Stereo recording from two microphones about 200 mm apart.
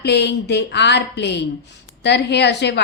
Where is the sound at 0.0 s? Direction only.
55° left (ahead or behind).